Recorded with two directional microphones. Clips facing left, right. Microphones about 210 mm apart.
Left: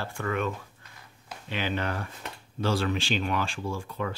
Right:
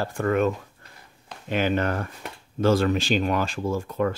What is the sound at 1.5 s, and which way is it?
Speech, 45° right (ahead or behind).